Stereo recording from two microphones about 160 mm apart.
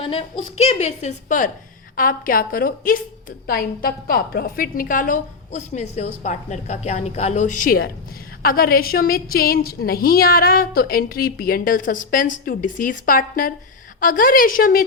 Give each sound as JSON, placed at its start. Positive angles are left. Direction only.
{"t": 0.0, "sound": "a woman's voice", "side_deg": 35}
{"t": 2.0, "sound": "a woman's voice", "side_deg": 60}